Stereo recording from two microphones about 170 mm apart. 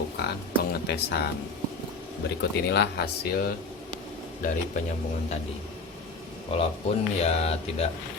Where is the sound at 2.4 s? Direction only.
80° left.